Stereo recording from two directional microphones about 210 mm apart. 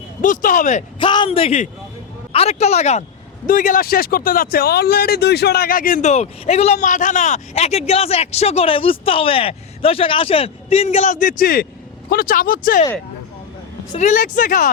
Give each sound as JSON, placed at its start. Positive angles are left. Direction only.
{"t": 0.2, "sound": "speech", "side_deg": 40}
{"t": 14.0, "sound": "speech", "side_deg": 35}